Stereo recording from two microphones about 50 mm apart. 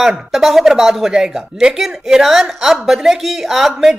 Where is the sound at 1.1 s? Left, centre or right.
Centre.